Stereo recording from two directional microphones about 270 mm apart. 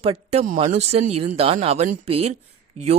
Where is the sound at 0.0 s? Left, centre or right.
Right.